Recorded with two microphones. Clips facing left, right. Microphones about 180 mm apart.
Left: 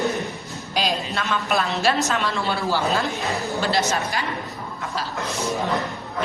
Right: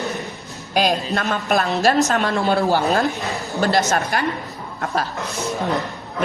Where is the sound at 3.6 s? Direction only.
45° right (ahead or behind).